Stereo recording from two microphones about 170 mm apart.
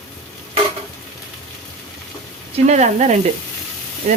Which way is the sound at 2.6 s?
45° right (ahead or behind).